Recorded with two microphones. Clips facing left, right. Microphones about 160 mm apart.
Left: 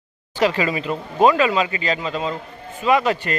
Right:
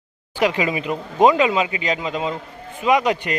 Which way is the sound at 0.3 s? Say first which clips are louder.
Even; 15° right (ahead or behind).